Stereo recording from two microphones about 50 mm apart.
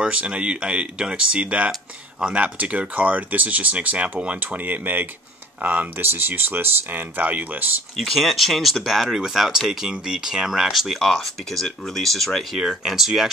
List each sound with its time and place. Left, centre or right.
0.0 s speech: right
8.0 s speech: centre
11.0 s speech: centre